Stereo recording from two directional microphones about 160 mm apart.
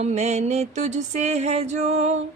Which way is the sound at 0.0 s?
45° right (ahead or behind).